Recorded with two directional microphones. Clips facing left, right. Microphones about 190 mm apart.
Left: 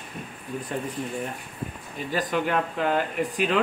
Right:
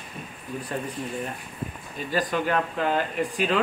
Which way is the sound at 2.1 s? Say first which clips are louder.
Even; 15° left (ahead or behind).